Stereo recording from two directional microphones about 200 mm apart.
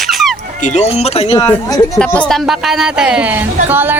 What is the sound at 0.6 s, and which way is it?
Speech, 35° left (ahead or behind).